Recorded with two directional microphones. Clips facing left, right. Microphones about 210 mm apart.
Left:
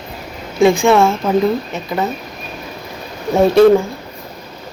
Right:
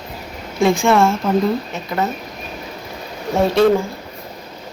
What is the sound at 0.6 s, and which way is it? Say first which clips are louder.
A woman's voice: left 3 dB; centre (ahead or behind).